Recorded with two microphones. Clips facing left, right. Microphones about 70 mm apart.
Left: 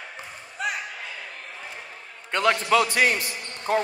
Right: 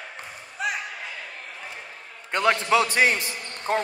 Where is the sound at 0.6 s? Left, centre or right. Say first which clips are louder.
Right 1 dB; centre.